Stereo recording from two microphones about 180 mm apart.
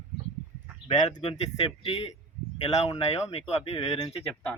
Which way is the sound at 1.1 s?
30° left (ahead or behind).